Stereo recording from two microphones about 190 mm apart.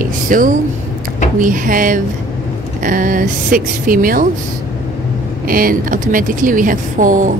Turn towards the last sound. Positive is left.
turn(degrees=-45)  # may be behind; listen again after turning